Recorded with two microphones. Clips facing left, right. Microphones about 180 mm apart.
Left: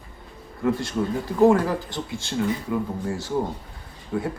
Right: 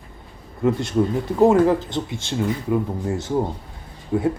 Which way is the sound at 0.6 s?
20° right (ahead or behind).